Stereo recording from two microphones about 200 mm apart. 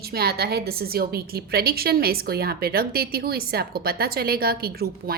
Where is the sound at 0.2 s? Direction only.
50° right (ahead or behind).